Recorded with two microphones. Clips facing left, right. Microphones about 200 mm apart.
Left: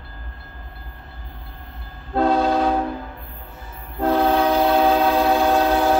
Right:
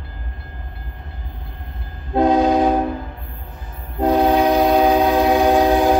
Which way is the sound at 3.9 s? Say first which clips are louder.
Right 3 dB; 15° right (ahead or behind).